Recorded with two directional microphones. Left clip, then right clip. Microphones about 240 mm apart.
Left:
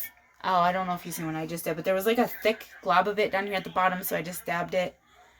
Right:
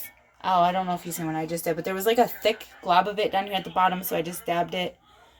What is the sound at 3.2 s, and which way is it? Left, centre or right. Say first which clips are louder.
Speech: right 2 dB; left.